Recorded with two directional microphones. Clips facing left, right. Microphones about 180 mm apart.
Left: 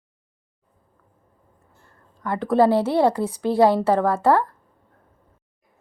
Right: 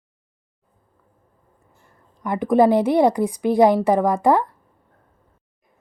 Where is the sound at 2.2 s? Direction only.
15° right (ahead or behind).